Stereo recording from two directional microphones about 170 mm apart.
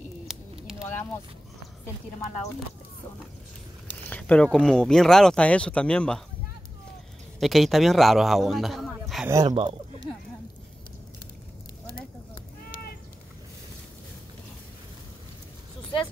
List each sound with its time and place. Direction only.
0.3 s a sound: 5° right (ahead or behind)
4.1 s speech: 5° left (ahead or behind)
7.3 s a man's voice: centre (ahead or behind)
9.3 s speech: 20° right (ahead or behind)